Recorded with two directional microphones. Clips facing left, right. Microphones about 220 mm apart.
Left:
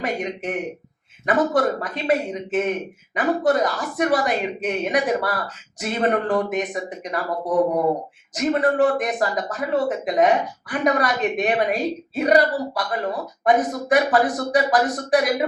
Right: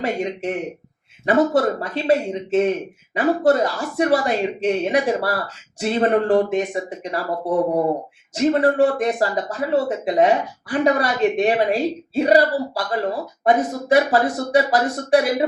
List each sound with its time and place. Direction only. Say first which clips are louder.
0.0 s speech: right 3 dB; 25° right (ahead or behind)